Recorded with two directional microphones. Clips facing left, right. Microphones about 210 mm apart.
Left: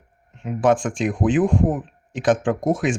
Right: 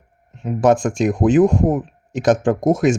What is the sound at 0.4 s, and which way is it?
Speech, 40° right (ahead or behind).